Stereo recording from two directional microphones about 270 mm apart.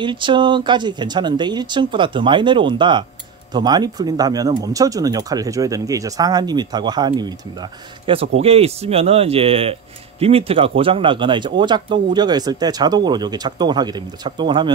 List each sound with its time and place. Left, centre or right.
0.0 s speech: centre
8.4 s speech: right